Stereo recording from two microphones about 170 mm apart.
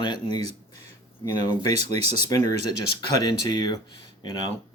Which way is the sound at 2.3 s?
20° left (ahead or behind).